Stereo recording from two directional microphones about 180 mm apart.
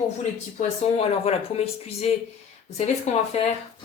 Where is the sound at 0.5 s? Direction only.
35° left (ahead or behind).